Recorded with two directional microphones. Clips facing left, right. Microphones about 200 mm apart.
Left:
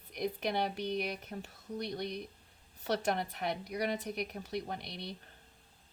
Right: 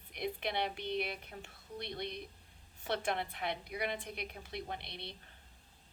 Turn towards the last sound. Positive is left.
turn(degrees=45)  # may be behind; listen again after turning